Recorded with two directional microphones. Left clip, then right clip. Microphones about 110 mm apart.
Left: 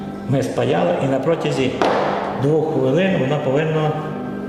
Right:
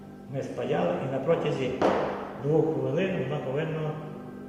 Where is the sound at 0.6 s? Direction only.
30° left (ahead or behind).